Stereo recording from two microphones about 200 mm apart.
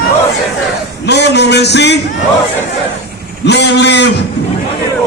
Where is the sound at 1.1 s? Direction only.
55° left (ahead or behind).